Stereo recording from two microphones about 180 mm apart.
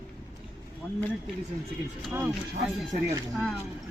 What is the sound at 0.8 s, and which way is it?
Speech, 10° left (ahead or behind).